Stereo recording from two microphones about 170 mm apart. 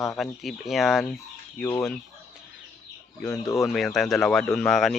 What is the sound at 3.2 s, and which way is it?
Speech, 10° left (ahead or behind).